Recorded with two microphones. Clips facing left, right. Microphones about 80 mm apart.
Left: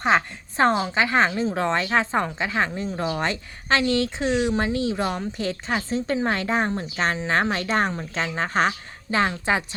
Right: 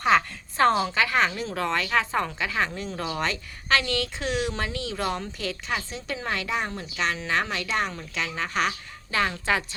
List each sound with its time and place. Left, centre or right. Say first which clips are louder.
0.0 s speech: left 1 dB; left
5.5 s a woman's voice: left 4 dB; left